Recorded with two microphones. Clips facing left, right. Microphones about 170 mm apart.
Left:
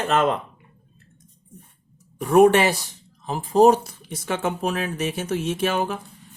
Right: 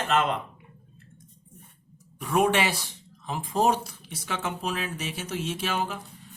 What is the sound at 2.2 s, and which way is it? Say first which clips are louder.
Speech: left 8 dB; 45° left (ahead or behind).